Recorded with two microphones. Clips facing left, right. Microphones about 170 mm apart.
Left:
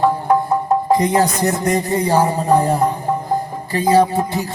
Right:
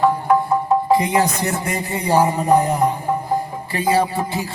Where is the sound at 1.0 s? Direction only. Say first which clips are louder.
Left 3 dB; 40° left (ahead or behind).